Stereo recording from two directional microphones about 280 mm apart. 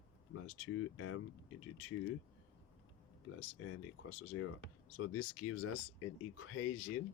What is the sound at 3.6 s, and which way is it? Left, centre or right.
Speech, left.